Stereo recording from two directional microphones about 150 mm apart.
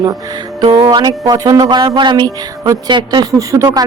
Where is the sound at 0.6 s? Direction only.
30° right (ahead or behind).